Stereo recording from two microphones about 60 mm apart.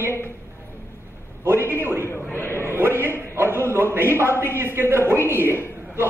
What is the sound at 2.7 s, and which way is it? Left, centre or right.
A man's voice, right.